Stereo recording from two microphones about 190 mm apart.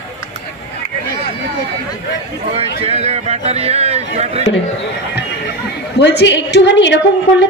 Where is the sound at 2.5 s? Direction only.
35° right (ahead or behind).